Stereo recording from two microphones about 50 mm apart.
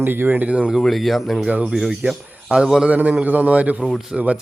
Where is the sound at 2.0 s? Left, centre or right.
Right.